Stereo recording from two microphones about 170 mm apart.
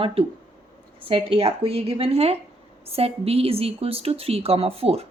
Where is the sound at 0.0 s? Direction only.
35° right (ahead or behind).